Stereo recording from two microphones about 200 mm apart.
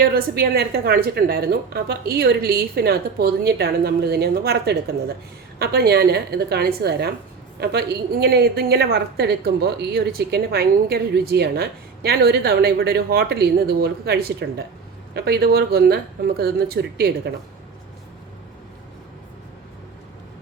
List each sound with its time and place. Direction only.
0.0 s a woman's voice: 50° right (ahead or behind)